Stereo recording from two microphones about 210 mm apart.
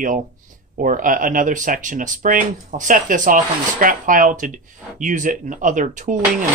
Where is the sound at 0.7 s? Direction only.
40° right (ahead or behind).